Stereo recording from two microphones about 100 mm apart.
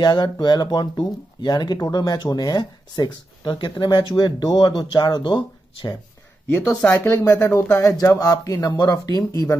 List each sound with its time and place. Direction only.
0.0 s speech: 45° left (ahead or behind)
6.9 s speech: 25° left (ahead or behind)